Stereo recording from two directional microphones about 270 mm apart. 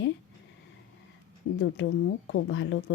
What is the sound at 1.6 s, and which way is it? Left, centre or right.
Speech, left.